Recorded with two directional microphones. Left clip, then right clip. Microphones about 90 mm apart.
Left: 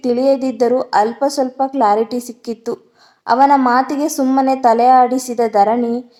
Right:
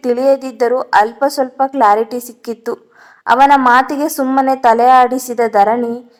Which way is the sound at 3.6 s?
10° right (ahead or behind).